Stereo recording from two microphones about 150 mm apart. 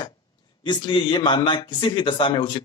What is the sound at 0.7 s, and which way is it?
Speech, 35° left (ahead or behind).